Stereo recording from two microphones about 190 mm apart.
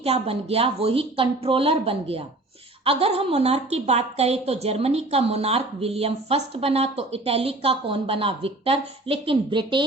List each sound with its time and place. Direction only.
0.0 s speech: 30° right (ahead or behind)